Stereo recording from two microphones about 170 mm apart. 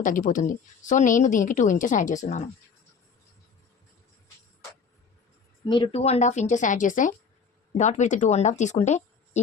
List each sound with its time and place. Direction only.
0.0 s a woman's voice: 50° left (ahead or behind)
5.6 s a woman's voice: 30° left (ahead or behind)